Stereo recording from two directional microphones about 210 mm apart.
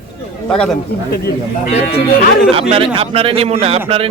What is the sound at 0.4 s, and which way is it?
Speech, 5° left (ahead or behind).